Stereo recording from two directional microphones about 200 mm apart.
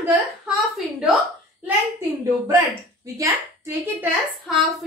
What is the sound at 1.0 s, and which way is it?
Speech, 5° right (ahead or behind).